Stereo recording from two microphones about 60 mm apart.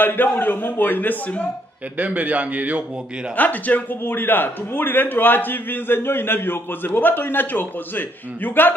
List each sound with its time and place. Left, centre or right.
0.0 s a man's voice: left
2.0 s a man's voice: right
3.3 s a man's voice: left